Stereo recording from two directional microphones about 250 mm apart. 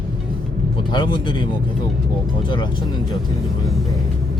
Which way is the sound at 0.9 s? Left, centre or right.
Centre.